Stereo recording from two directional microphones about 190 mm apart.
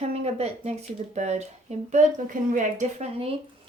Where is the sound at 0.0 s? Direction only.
35° right (ahead or behind).